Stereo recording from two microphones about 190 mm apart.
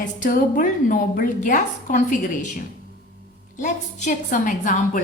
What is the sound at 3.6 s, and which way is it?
A woman's voice, 45° left (ahead or behind).